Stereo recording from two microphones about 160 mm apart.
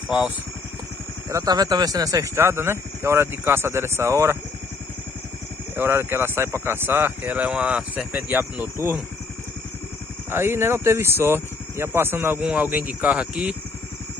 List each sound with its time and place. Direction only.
1.3 s speech: 25° right (ahead or behind)
5.8 s speech: 15° right (ahead or behind)
10.3 s speech: 15° right (ahead or behind)